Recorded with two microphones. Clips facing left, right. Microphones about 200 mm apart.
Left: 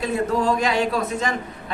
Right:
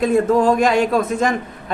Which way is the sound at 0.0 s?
50° right (ahead or behind).